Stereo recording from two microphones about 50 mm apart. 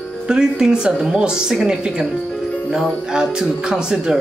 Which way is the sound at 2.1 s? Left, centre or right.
Left.